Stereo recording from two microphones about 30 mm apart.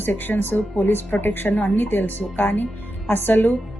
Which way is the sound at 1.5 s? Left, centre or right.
Left.